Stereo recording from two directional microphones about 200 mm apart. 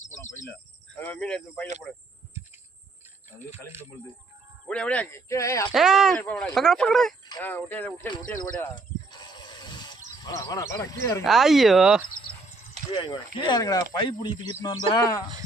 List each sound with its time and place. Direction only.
0.9 s speech: 10° left (ahead or behind)
4.7 s speech: 5° left (ahead or behind)
5.7 s speech: centre (ahead or behind)
7.3 s speech: 15° left (ahead or behind)
8.7 s a sound: 20° left (ahead or behind)
10.2 s speech: 15° left (ahead or behind)
11.2 s speech: centre (ahead or behind)
12.9 s speech: 25° left (ahead or behind)